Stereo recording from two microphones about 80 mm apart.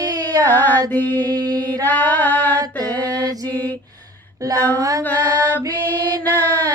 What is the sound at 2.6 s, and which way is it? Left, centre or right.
Mantra, right.